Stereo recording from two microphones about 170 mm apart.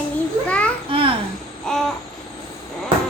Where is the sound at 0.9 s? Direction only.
30° right (ahead or behind).